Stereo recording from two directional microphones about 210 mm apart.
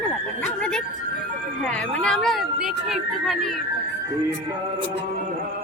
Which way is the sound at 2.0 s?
Centre (ahead or behind).